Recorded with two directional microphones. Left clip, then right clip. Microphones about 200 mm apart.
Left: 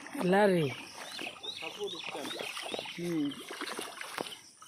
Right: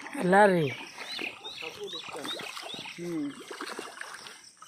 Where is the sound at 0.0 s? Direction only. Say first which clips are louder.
Right 6 dB; 5° left (ahead or behind).